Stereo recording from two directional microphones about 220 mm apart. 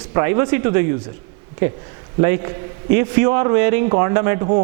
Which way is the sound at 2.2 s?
15° right (ahead or behind).